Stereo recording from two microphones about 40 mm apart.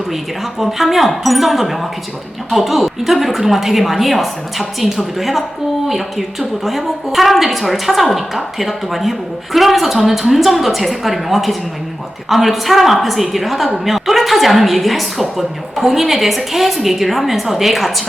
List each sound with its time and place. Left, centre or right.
0.6 s a woman's voice: centre
6.7 s a woman's voice: centre